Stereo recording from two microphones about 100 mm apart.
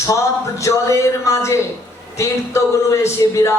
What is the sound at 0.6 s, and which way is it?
A man's voice, 30° left (ahead or behind).